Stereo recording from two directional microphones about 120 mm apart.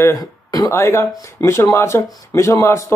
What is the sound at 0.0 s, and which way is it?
Speech, 30° left (ahead or behind).